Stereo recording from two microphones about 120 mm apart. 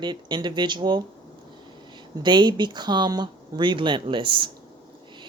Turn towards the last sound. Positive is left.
turn(degrees=-45)  # may be behind; listen again after turning